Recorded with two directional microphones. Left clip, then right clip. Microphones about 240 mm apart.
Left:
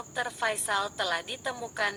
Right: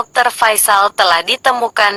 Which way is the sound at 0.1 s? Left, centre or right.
Right.